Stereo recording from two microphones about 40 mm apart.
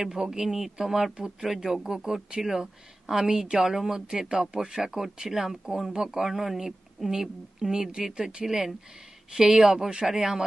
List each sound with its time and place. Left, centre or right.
0.0 s speech: centre